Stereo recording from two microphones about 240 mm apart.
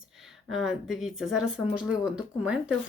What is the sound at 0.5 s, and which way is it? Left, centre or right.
Speech, centre.